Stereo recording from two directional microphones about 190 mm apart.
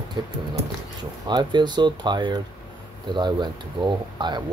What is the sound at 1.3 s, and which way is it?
Speech, 20° right (ahead or behind).